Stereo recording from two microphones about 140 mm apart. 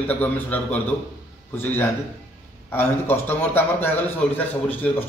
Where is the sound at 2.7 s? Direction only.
15° left (ahead or behind).